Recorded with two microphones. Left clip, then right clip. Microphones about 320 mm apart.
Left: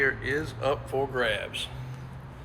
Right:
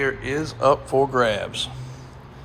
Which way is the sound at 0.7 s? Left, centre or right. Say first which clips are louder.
Right 10 dB; right.